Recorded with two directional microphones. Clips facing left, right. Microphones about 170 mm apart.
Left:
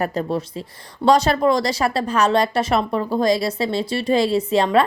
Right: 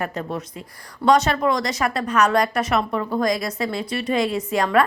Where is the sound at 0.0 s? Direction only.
35° left (ahead or behind).